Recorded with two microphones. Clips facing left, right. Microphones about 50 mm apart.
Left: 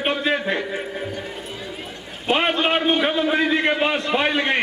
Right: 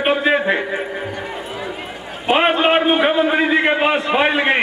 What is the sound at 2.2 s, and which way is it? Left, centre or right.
A man's voice, centre.